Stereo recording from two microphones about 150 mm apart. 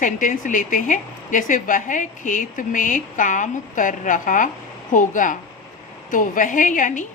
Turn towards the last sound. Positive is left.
turn(degrees=60)  # may be behind; listen again after turning